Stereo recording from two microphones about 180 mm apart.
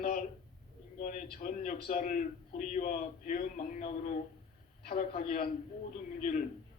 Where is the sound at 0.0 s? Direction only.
55° left (ahead or behind).